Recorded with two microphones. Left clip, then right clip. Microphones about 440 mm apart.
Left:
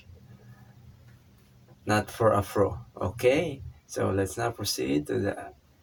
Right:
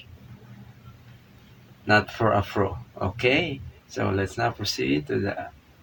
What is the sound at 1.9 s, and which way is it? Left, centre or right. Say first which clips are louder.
Speech: right 3 dB; left.